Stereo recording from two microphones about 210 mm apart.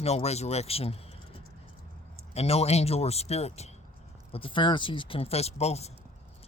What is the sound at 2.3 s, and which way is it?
Speech, 30° left (ahead or behind).